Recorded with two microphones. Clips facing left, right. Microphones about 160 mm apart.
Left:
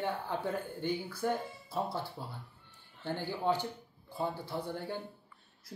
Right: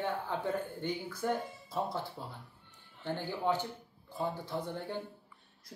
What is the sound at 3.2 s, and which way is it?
A man's voice, 15° left (ahead or behind).